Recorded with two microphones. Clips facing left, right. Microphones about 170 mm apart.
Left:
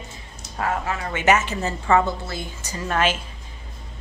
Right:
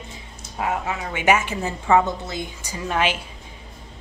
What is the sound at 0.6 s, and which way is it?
A woman's voice, 15° right (ahead or behind).